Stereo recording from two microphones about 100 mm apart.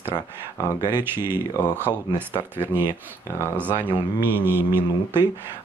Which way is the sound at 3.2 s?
30° left (ahead or behind).